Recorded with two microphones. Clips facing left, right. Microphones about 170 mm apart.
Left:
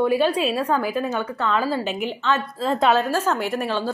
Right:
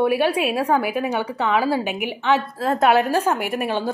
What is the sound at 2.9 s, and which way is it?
A woman's voice, 15° right (ahead or behind).